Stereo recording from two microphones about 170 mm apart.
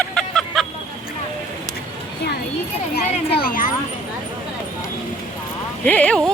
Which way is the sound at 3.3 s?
55° left (ahead or behind).